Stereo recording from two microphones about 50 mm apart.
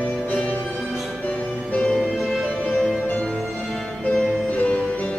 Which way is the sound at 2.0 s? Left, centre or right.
Centre.